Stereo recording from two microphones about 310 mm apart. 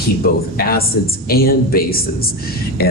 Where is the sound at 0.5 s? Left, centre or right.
Left.